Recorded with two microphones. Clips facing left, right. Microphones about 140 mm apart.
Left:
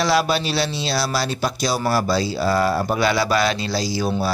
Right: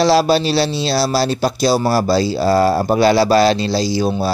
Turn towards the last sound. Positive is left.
turn(degrees=-25)  # may be behind; listen again after turning